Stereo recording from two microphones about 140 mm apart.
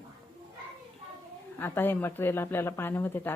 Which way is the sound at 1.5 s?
15° left (ahead or behind).